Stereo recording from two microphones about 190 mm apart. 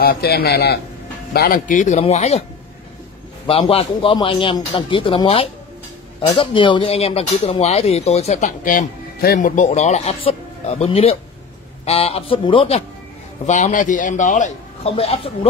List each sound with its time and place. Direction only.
0.0 s a man's voice: 55° left (ahead or behind); by 2.4 s 35° left (ahead or behind)
3.4 s a man's voice: 30° left (ahead or behind)
13.5 s speech: 40° left (ahead or behind)